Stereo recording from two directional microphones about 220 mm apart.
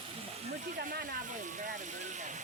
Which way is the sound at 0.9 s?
40° right (ahead or behind).